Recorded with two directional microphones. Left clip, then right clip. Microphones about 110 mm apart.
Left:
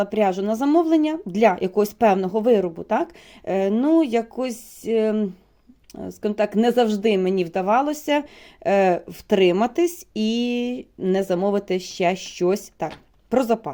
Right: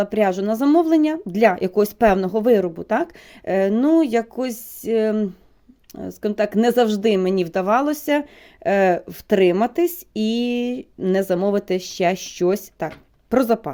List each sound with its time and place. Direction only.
0.0 s a woman's voice: 25° right (ahead or behind)
8.1 s a woman's voice: 15° right (ahead or behind)